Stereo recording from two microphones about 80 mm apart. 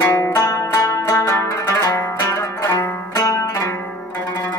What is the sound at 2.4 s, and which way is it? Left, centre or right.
Zither, left.